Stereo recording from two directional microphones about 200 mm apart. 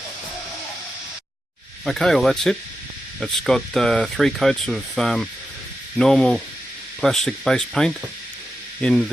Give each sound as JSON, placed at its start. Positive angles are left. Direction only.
{"t": 1.8, "sound": "speech", "side_deg": 0}